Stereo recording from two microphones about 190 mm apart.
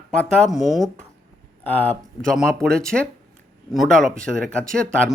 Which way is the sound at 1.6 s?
10° left (ahead or behind).